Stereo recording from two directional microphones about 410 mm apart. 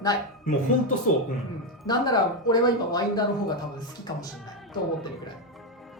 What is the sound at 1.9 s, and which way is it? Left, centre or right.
Speech, centre.